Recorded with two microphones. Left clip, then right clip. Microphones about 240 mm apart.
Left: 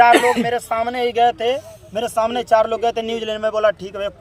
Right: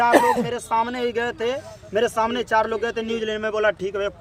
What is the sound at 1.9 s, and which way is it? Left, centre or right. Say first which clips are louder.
Speech: left 1 dB; centre.